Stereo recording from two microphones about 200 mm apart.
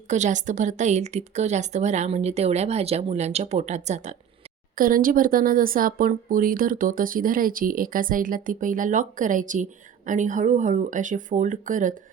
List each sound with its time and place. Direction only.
0.1 s a woman's voice: 35° right (ahead or behind)